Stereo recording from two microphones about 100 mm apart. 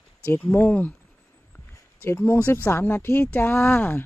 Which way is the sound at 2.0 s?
25° left (ahead or behind).